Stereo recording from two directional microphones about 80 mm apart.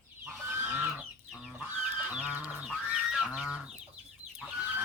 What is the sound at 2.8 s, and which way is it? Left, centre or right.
Goose, centre.